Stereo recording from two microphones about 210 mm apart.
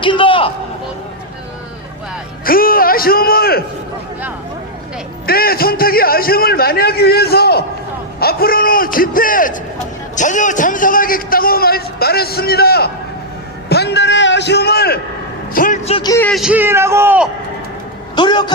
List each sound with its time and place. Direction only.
0.0 s a man's voice: 25° left (ahead or behind)
2.4 s a man's voice: 45° left (ahead or behind)
5.2 s a man's voice: 45° left (ahead or behind)
13.7 s a sound: 50° left (ahead or behind)
15.5 s a man's voice: 40° left (ahead or behind)
16.0 s speech: 15° left (ahead or behind)
16.3 s a man's voice: 5° right (ahead or behind)
18.2 s a man's voice: 20° left (ahead or behind)